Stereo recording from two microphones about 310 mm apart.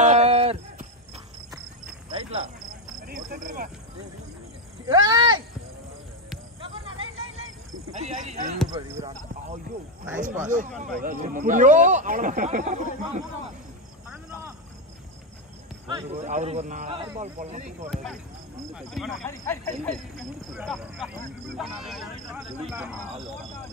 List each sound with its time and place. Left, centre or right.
0.0 s a sound: right
2.0 s cricket: centre
3.1 s a sound: right
4.8 s speech: centre
7.9 s cricket: right
8.6 s speech: centre
10.4 s speech: right
14.0 s a sound: centre
15.9 s speech: centre
17.8 s speech: centre